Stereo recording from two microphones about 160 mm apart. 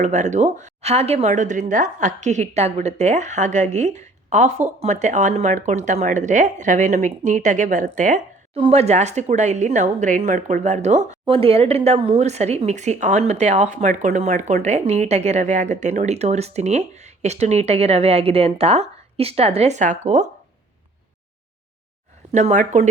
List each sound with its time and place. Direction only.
0.0 s speech: 45° right (ahead or behind)
8.5 s speech: 40° right (ahead or behind)
22.3 s speech: 45° right (ahead or behind)